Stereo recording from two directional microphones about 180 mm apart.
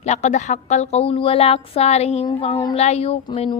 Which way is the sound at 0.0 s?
40° left (ahead or behind).